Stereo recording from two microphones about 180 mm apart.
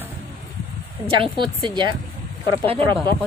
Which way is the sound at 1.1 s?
25° right (ahead or behind).